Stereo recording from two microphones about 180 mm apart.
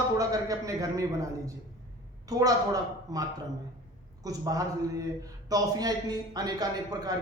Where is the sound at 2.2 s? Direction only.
20° right (ahead or behind).